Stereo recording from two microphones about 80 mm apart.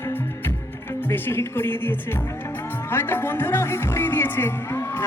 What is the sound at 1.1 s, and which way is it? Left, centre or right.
Speech, left.